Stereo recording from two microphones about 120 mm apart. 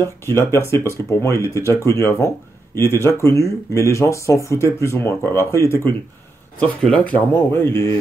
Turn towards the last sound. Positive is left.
turn(degrees=20)  # may be behind; listen again after turning